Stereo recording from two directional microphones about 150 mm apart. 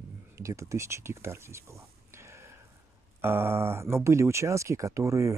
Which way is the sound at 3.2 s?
15° right (ahead or behind).